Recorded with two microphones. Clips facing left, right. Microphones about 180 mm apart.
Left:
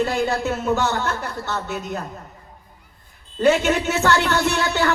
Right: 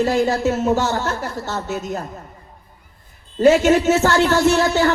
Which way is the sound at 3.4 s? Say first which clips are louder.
Right 5 dB; 40° right (ahead or behind).